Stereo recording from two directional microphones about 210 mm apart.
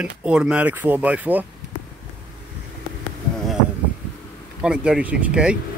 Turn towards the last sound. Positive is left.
turn(degrees=-5)  # may be behind; listen again after turning